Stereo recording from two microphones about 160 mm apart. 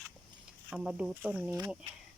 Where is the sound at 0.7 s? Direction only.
5° right (ahead or behind).